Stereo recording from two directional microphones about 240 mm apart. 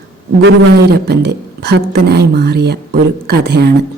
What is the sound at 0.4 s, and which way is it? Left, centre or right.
Speech, right.